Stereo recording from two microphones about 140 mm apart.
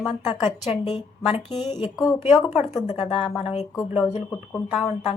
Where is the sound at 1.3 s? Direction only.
50° left (ahead or behind).